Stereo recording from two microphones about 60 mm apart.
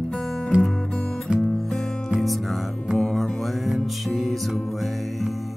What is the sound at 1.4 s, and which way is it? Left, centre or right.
Music, centre.